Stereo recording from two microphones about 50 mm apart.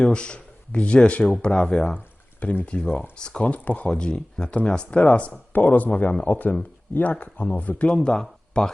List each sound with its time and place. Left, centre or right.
0.0 s speech: centre
2.4 s speech: left
3.2 s speech: centre
3.4 s speech: left
7.9 s speech: centre